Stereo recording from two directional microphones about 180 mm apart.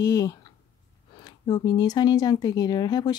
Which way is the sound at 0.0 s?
20° left (ahead or behind).